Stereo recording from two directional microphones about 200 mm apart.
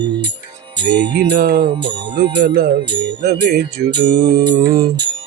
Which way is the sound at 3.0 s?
55° right (ahead or behind).